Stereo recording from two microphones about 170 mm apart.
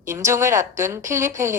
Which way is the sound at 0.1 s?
15° right (ahead or behind).